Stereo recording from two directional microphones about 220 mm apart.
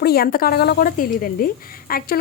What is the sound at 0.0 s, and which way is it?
A woman's voice, 45° left (ahead or behind).